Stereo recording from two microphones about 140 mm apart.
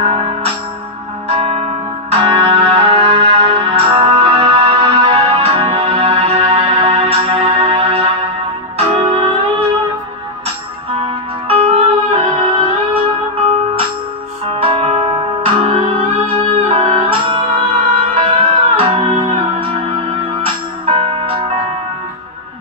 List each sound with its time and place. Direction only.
0.0 s music: 45° right (ahead or behind)
10.9 s music: 40° right (ahead or behind)
14.6 s music: 40° right (ahead or behind)